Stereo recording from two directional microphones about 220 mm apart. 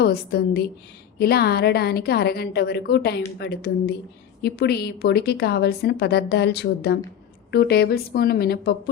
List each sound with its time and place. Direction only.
0.0 s a woman's voice: 50° left (ahead or behind)